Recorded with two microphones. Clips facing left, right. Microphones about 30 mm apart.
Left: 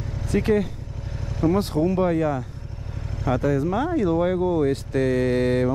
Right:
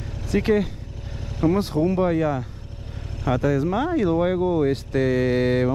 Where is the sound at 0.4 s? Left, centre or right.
Centre.